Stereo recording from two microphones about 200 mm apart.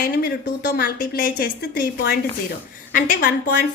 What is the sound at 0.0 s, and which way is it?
Speech, 50° left (ahead or behind).